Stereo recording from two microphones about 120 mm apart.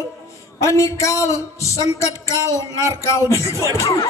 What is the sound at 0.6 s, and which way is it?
Speech, 25° left (ahead or behind).